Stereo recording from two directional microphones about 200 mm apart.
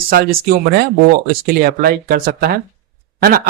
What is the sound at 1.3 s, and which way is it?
Speech, 50° right (ahead or behind).